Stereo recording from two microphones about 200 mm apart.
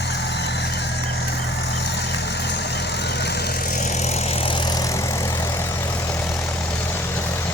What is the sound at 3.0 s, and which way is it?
Vehicle, 55° left (ahead or behind).